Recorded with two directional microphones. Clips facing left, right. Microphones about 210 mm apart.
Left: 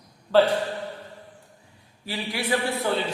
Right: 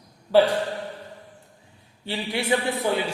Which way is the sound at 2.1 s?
25° right (ahead or behind).